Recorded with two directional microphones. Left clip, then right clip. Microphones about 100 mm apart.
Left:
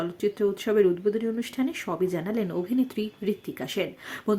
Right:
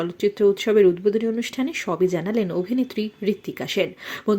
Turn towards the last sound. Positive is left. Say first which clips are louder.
# right 5 dB
turn(degrees=-30)  # may be behind; listen again after turning